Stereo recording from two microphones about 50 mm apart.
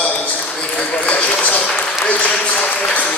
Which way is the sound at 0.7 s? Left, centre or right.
Left.